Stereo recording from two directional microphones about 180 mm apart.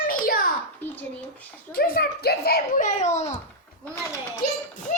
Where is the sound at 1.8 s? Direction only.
60° left (ahead or behind).